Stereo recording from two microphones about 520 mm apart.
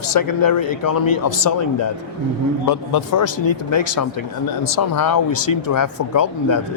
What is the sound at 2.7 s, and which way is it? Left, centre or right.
Speech, left.